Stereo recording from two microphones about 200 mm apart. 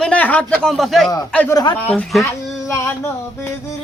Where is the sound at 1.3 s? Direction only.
10° left (ahead or behind).